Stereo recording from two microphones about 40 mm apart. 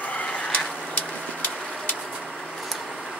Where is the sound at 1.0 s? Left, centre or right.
Left.